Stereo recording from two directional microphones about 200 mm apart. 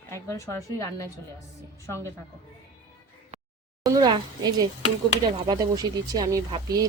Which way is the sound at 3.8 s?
20° right (ahead or behind).